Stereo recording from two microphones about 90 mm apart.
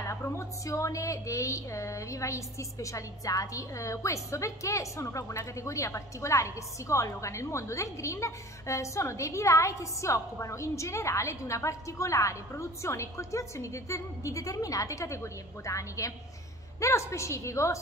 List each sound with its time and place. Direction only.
0.1 s a woman's voice: 35° left (ahead or behind)